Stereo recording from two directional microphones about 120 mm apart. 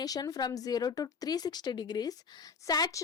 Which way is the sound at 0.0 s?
30° left (ahead or behind).